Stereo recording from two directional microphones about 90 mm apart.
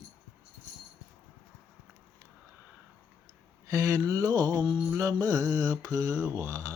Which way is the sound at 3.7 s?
40° right (ahead or behind).